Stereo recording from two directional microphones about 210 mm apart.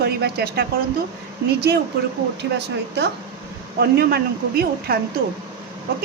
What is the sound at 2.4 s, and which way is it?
Speech, 55° right (ahead or behind).